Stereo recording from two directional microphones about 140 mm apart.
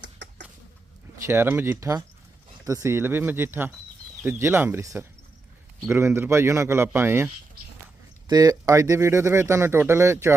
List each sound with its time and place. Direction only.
1.3 s speech: 15° right (ahead or behind)
8.3 s speech: 25° right (ahead or behind)